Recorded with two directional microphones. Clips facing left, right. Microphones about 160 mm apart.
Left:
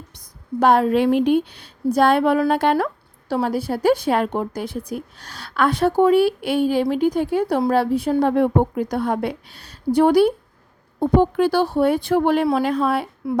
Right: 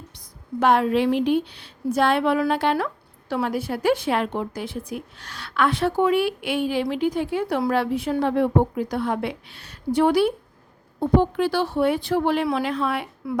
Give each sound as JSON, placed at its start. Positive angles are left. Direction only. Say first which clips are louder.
{"t": 0.6, "sound": "a woman's voice", "louder": "left 3 dB", "side_deg": 40}
{"t": 8.3, "sound": "a woman's voice", "louder": "left 2 dB", "side_deg": 50}